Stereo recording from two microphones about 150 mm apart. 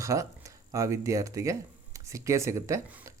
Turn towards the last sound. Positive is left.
turn(degrees=-20)  # may be behind; listen again after turning